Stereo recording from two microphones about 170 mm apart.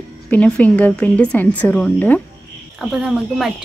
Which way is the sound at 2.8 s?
5° right (ahead or behind).